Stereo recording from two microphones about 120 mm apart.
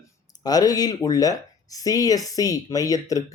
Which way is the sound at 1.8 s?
30° left (ahead or behind).